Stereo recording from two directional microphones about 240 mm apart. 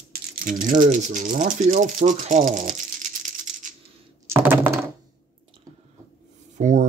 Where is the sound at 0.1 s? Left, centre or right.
Right.